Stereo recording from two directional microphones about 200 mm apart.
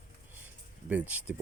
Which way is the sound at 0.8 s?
10° right (ahead or behind).